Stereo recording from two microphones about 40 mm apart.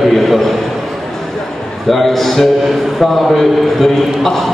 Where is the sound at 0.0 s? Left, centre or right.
Centre.